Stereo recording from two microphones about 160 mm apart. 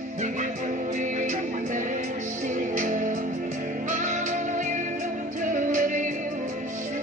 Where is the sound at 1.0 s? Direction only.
50° right (ahead or behind).